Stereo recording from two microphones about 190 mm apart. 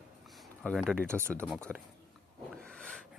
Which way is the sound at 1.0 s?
15° right (ahead or behind).